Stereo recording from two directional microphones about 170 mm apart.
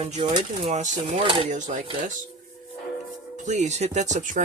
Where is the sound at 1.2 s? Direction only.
30° right (ahead or behind).